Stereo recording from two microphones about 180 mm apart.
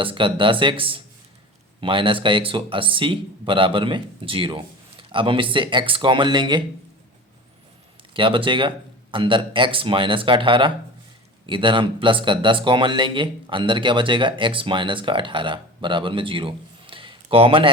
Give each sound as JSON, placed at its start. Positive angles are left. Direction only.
{"t": 0.0, "sound": "speech", "side_deg": -30}
{"t": 8.1, "sound": "speech", "side_deg": -30}